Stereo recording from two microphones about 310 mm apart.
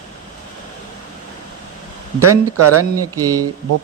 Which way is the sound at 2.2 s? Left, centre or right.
Right.